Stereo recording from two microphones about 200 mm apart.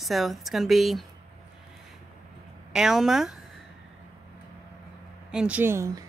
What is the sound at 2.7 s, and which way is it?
Speech, centre (ahead or behind).